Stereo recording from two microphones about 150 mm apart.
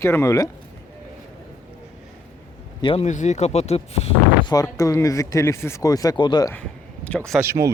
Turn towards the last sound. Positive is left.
turn(degrees=-20)  # may be behind; listen again after turning